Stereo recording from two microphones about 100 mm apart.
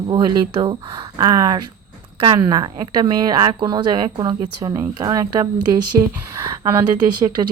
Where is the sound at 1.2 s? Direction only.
35° right (ahead or behind).